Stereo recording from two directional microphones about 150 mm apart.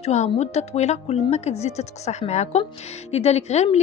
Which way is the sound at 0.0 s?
50° left (ahead or behind).